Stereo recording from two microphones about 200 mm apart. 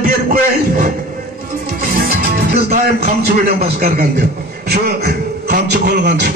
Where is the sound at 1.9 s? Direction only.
50° right (ahead or behind).